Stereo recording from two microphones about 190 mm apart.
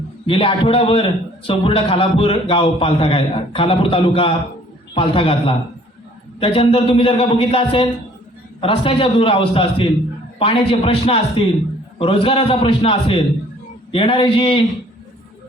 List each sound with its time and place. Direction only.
0.3 s a man's voice: 30° left (ahead or behind)